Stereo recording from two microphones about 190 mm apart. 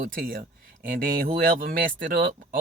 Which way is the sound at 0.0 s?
50° right (ahead or behind).